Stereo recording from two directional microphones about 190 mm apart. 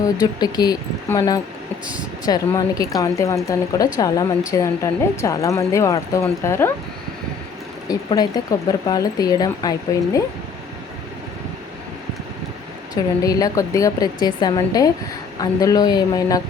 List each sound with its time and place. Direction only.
0.0 s a woman's voice: 20° left (ahead or behind)
7.9 s speech: 20° left (ahead or behind)
13.2 s speech: 20° left (ahead or behind)